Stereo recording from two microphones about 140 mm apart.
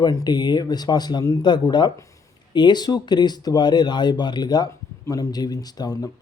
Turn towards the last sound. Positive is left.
turn(degrees=25)  # may be behind; listen again after turning